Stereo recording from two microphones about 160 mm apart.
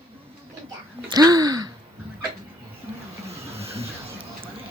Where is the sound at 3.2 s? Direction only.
40° right (ahead or behind).